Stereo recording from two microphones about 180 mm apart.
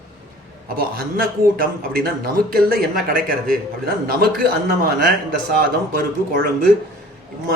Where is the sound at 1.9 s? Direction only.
55° right (ahead or behind).